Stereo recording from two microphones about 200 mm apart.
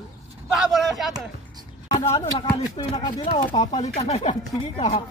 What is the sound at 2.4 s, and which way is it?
Speech, 20° left (ahead or behind).